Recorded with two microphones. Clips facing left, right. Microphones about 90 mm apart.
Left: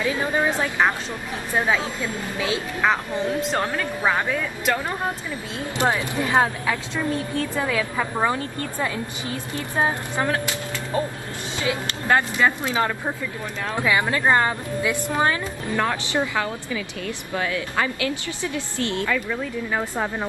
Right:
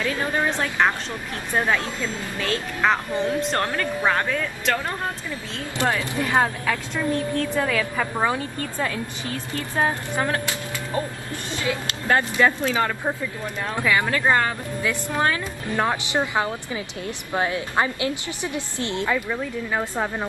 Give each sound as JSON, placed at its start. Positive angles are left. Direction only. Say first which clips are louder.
{"t": 0.0, "sound": "a woman's voice", "louder": "left 1 dB", "side_deg": 10}
{"t": 2.8, "sound": "speech", "louder": "right 1 dB", "side_deg": 0}
{"t": 5.6, "sound": "speech", "louder": "left 2 dB", "side_deg": 20}
{"t": 11.7, "sound": "speech", "louder": "left 1 dB", "side_deg": 10}
{"t": 15.7, "sound": "a woman's voice", "louder": "right 1 dB", "side_deg": -20}